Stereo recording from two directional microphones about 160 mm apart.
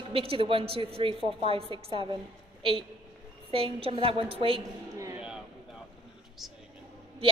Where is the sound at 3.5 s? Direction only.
35° right (ahead or behind).